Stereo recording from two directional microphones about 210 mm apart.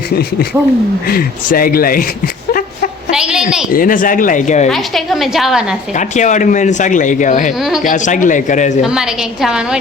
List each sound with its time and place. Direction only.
1.0 s speech: 45° left (ahead or behind)
3.1 s a woman's voice: 5° right (ahead or behind)
3.7 s speech: 40° left (ahead or behind)
4.7 s a woman's voice: centre (ahead or behind)
5.9 s speech: 35° left (ahead or behind)
8.8 s a woman's voice: 5° right (ahead or behind)